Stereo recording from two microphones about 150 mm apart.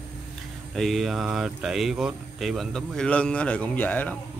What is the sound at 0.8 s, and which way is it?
Speech, centre (ahead or behind).